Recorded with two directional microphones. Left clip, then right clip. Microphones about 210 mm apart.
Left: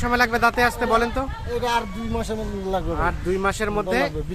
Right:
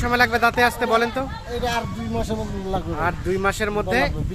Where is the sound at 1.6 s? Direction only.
35° left (ahead or behind).